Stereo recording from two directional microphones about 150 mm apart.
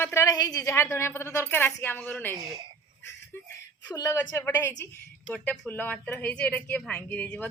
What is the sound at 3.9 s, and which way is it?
A woman's voice, 20° left (ahead or behind).